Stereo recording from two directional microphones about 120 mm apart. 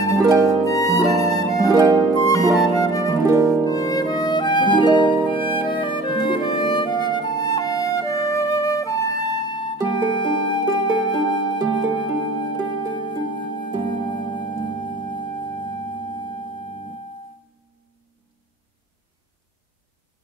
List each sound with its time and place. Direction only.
0.2 s harp: 25° right (ahead or behind)
0.7 s music: 30° left (ahead or behind)
1.7 s music: 30° right (ahead or behind)
2.1 s music: 30° left (ahead or behind)
3.3 s harp: 30° right (ahead or behind)
3.6 s harp: 30° left (ahead or behind)
4.9 s music: 45° left (ahead or behind)
12.6 s harp: 40° left (ahead or behind)
13.3 s music: 40° left (ahead or behind)